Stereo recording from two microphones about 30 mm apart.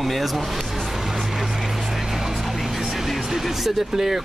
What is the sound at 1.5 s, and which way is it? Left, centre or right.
Music, centre.